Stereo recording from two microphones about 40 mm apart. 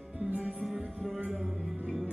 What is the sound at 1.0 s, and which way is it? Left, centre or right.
Music, centre.